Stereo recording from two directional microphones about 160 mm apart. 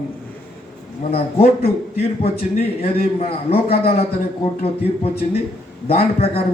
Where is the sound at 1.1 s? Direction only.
40° left (ahead or behind).